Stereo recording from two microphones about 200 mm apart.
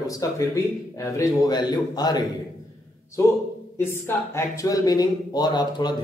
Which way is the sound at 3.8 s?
10° left (ahead or behind).